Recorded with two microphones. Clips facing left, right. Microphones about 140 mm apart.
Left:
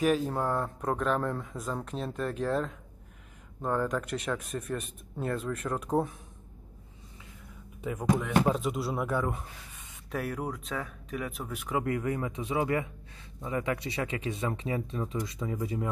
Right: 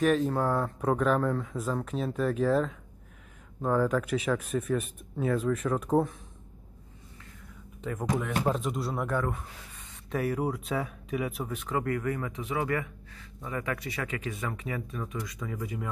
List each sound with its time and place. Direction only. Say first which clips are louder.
0.0 s speech: right 2 dB; 5° left (ahead or behind)
7.8 s speech: left 2 dB; centre (ahead or behind)
11.6 s speech: even; 15° left (ahead or behind)